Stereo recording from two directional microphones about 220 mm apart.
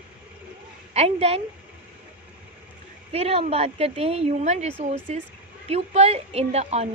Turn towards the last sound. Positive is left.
turn(degrees=-30)  # may be behind; listen again after turning